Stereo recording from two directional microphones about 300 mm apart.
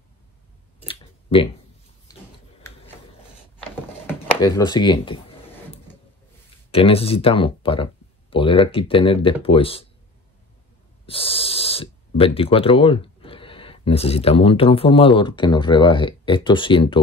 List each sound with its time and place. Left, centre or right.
0.8 s clicking: centre
4.4 s speech: centre
6.7 s speech: centre
11.1 s speech: centre